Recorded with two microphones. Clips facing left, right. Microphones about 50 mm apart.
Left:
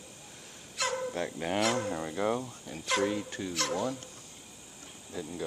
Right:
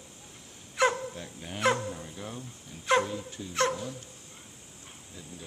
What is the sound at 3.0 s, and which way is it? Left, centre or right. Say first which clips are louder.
Dog: left 5 dB; left.